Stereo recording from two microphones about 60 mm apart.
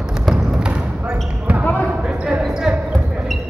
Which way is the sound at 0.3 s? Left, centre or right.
Centre.